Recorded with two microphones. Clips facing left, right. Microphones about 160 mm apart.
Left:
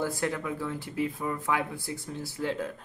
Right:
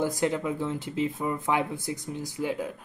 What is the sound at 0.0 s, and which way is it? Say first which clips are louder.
Speech: right 4 dB; 20° right (ahead or behind).